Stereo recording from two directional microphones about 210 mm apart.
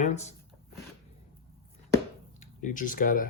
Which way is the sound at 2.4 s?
40° left (ahead or behind).